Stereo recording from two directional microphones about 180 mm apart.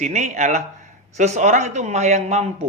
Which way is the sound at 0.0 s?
40° right (ahead or behind).